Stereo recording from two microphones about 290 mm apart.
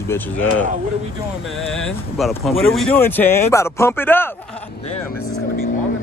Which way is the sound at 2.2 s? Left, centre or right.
Centre.